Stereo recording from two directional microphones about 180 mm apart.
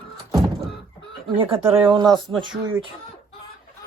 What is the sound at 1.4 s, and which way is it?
Speech, 30° right (ahead or behind).